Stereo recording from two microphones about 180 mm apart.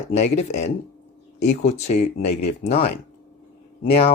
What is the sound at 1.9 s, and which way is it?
Speech, 45° left (ahead or behind).